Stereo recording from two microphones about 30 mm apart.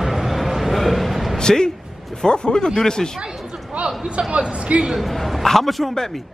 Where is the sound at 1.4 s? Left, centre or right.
Left.